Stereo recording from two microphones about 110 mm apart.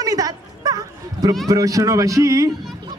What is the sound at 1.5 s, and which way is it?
A woman's voice, 30° right (ahead or behind).